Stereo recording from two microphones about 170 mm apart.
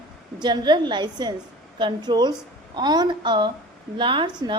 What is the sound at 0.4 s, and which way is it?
A woman's voice, 25° right (ahead or behind).